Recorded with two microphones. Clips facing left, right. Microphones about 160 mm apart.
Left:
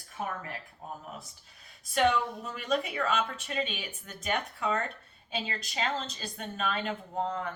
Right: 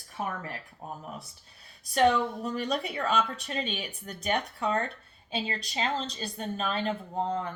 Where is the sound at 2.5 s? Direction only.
35° right (ahead or behind).